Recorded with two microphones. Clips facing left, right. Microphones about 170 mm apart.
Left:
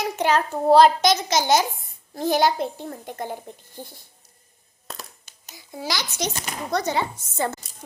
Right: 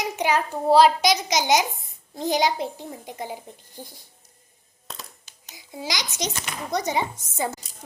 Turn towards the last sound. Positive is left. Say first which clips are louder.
# left 2 dB
turn(degrees=-15)  # may be behind; listen again after turning